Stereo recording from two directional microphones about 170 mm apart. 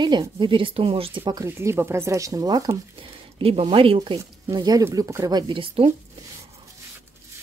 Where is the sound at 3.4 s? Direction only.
35° right (ahead or behind).